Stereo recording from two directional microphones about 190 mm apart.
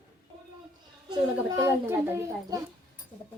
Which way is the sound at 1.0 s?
15° right (ahead or behind).